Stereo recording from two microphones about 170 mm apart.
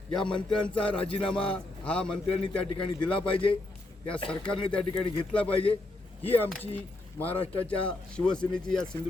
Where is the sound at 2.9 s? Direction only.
25° left (ahead or behind).